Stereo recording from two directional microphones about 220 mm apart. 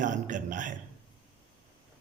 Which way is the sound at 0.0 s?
35° right (ahead or behind).